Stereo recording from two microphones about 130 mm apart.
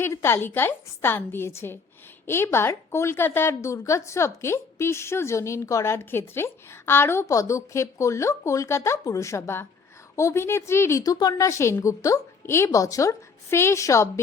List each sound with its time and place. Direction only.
0.0 s a woman's voice: 20° left (ahead or behind)